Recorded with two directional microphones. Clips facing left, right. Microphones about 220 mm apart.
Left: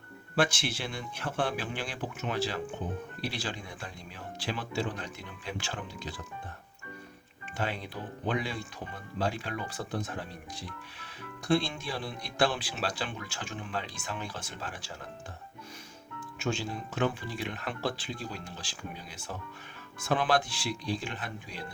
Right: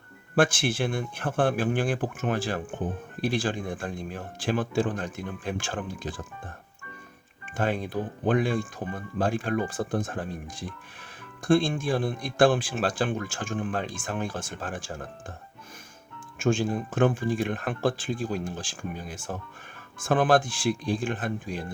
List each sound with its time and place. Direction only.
0.3 s speech: 50° right (ahead or behind)
7.5 s speech: 50° right (ahead or behind)
16.4 s speech: 50° right (ahead or behind)